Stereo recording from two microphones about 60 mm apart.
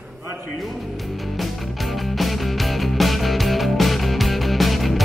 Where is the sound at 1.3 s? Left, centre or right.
Centre.